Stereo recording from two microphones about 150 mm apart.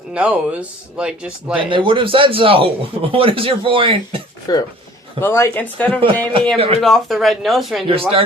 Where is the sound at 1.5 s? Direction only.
35° right (ahead or behind).